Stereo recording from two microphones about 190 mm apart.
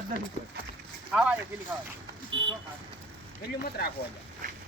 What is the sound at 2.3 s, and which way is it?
Vehicle, 80° right.